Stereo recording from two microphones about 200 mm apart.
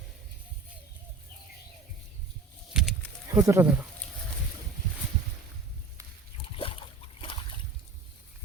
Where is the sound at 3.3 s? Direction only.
15° right (ahead or behind).